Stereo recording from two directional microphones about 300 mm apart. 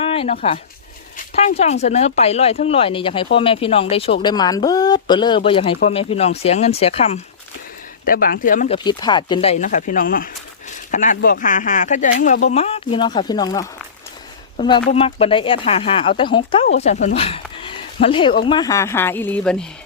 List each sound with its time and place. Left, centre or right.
0.0 s speech: centre